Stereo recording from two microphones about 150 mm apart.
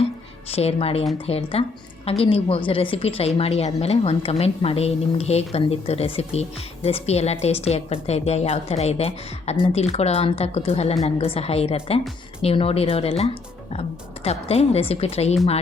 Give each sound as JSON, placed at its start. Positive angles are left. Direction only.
{"t": 0.5, "sound": "a woman's voice", "side_deg": 40}